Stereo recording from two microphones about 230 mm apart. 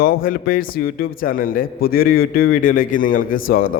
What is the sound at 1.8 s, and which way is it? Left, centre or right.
A man's voice, left.